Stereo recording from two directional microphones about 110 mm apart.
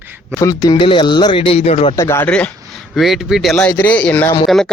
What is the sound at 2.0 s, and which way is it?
Speech, 20° left (ahead or behind).